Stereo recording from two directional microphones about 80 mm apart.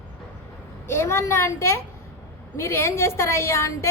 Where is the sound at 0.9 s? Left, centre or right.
Left.